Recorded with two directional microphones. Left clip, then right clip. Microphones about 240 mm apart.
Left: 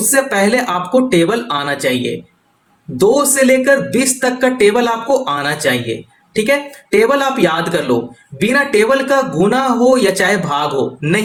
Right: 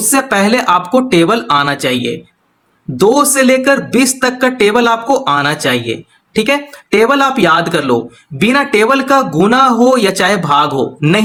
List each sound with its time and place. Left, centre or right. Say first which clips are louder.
0.3 s speech: right 3 dB; right